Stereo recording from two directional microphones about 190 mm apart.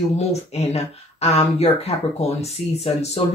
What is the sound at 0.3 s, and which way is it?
Speech, 35° left (ahead or behind).